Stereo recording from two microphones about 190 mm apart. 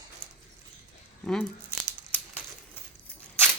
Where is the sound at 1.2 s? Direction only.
5° left (ahead or behind).